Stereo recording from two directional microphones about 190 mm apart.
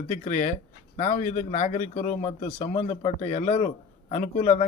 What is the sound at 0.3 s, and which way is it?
Speech, 40° left (ahead or behind).